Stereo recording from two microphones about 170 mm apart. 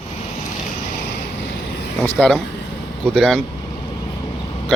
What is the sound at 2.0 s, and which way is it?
Speech, 10° left (ahead or behind).